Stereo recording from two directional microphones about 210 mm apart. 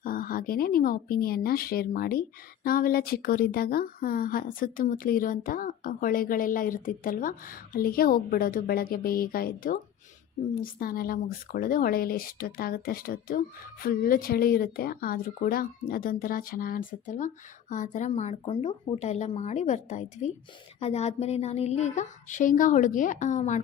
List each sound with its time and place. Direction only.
0.0 s a woman's voice: 40° left (ahead or behind)